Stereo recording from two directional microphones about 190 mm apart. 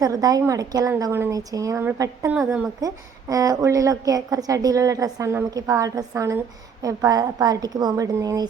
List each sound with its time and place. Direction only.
0.0 s a woman's voice: 20° right (ahead or behind)